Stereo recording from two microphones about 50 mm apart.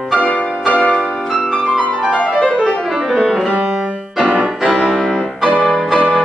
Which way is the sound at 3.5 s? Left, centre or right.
Centre.